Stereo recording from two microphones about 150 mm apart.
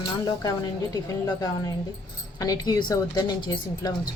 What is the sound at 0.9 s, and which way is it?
Speech, 25° left (ahead or behind).